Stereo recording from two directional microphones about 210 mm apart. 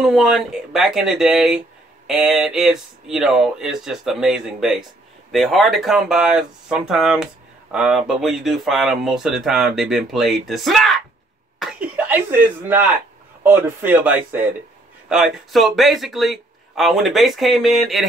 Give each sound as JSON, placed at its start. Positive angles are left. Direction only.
{"t": 0.0, "sound": "speech", "side_deg": 0}